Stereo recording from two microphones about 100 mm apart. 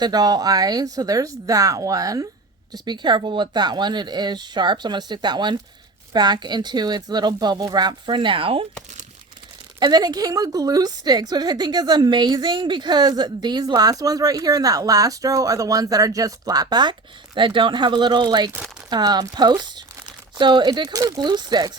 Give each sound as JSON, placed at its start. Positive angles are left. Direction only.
{"t": 0.0, "sound": "a woman's voice", "side_deg": -40}
{"t": 9.8, "sound": "a woman's voice", "side_deg": -45}
{"t": 17.3, "sound": "speech", "side_deg": -55}